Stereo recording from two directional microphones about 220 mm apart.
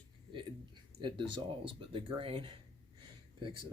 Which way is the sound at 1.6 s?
25° right (ahead or behind).